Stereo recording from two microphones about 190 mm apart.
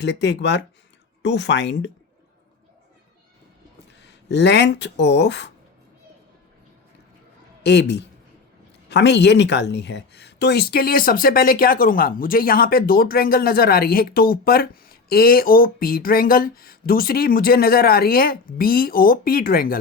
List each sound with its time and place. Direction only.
0.0 s speech: 65° left (ahead or behind)
4.0 s speech: 65° left (ahead or behind)
7.6 s speech: 65° left (ahead or behind)